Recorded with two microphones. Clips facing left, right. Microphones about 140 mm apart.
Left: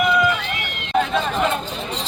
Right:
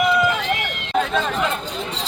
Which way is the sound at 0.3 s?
45° right (ahead or behind).